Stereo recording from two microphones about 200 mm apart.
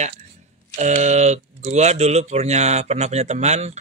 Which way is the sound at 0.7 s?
35° right (ahead or behind).